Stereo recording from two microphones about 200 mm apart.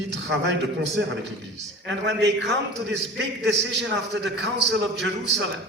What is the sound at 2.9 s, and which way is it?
A man's voice, 60° right (ahead or behind).